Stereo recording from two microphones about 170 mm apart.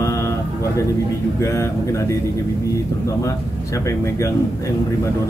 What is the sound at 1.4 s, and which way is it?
Speech, 15° left (ahead or behind).